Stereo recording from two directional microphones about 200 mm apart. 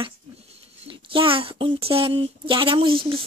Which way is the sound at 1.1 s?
25° right (ahead or behind).